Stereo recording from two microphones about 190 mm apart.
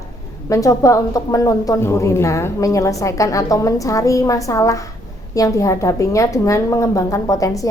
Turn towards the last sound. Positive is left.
turn(degrees=15)  # may be behind; listen again after turning